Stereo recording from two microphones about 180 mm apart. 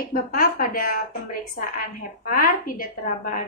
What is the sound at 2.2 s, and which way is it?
A woman's voice, 50° left (ahead or behind).